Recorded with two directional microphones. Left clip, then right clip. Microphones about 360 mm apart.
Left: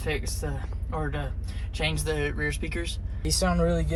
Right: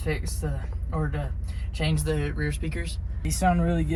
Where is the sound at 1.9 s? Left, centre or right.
Centre.